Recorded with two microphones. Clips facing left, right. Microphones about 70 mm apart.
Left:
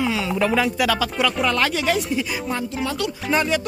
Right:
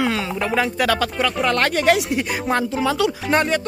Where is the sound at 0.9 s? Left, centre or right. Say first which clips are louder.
Right 1 dB; right.